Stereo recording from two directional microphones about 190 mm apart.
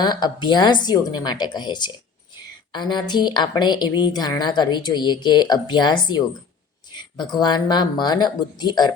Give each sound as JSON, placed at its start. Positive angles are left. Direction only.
{"t": 0.0, "sound": "a woman's voice", "side_deg": 25}